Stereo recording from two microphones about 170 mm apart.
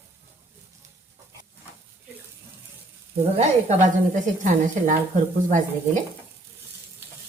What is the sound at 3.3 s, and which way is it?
A woman's voice, 40° right (ahead or behind).